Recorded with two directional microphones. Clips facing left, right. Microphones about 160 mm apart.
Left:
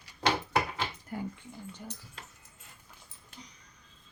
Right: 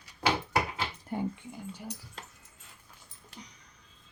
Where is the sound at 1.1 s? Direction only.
25° right (ahead or behind).